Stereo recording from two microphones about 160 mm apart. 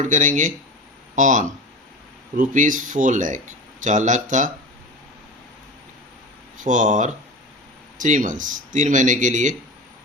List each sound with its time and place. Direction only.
0.0 s speech: 50° right (ahead or behind)
6.7 s speech: 50° right (ahead or behind)